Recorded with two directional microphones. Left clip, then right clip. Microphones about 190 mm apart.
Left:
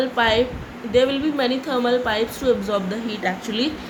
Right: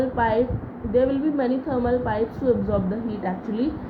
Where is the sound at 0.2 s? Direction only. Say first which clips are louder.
Left 4 dB; 10° left (ahead or behind).